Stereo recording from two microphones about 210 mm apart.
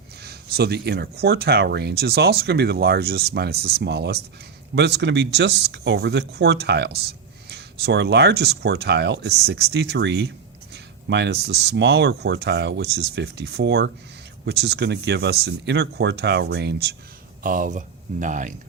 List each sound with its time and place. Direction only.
0.2 s speech: 50° right (ahead or behind)
17.4 s speech: 40° right (ahead or behind)